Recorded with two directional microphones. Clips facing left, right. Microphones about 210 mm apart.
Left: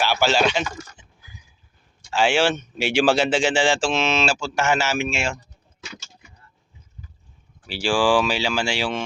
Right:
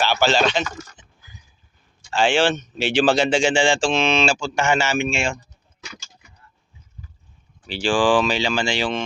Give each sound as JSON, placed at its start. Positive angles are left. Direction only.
{"t": 0.0, "sound": "speech", "side_deg": 10}
{"t": 2.0, "sound": "a man's voice", "side_deg": 5}
{"t": 5.8, "sound": "a sound", "side_deg": 20}
{"t": 7.7, "sound": "speech", "side_deg": 10}